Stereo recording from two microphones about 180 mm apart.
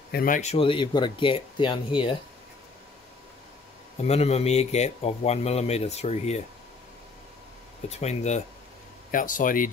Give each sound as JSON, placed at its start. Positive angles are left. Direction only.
{"t": 0.1, "sound": "speech", "side_deg": 50}
{"t": 4.0, "sound": "a man's voice", "side_deg": 35}
{"t": 8.0, "sound": "a man's voice", "side_deg": 40}